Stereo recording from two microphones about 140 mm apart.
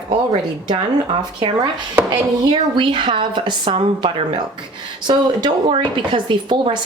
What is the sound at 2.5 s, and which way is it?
Speech, 35° right (ahead or behind).